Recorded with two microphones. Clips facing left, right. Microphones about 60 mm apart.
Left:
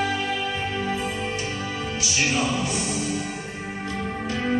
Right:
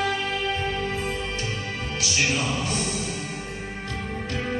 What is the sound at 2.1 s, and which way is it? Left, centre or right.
Music, left.